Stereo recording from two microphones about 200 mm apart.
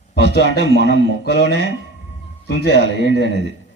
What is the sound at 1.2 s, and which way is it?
Speech, 55° left (ahead or behind).